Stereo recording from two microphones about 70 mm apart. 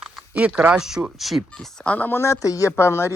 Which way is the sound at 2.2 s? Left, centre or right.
Left.